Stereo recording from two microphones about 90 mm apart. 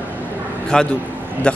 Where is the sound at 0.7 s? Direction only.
10° left (ahead or behind).